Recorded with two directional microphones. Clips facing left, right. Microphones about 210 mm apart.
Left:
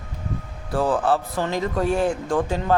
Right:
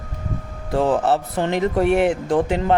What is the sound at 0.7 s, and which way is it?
Speech, 20° right (ahead or behind).